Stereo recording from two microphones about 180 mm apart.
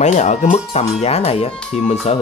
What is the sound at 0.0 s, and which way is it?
Speech, 40° left (ahead or behind).